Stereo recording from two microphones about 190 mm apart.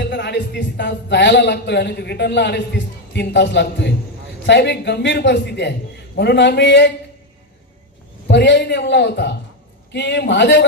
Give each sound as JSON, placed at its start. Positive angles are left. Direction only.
{"t": 0.0, "sound": "speech", "side_deg": 65}
{"t": 8.3, "sound": "speech", "side_deg": 65}